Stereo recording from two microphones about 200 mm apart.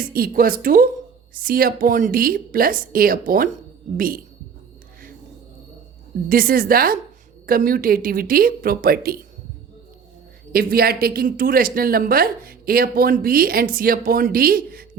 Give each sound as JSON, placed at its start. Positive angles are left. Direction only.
{"t": 0.0, "sound": "speech", "side_deg": -45}
{"t": 6.2, "sound": "speech", "side_deg": -45}
{"t": 10.5, "sound": "speech", "side_deg": -50}